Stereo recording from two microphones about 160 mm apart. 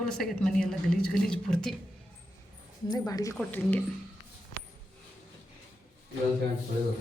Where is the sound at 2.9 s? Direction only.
25° left (ahead or behind).